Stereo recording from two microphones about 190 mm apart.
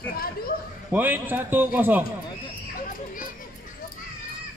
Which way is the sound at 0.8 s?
10° right (ahead or behind).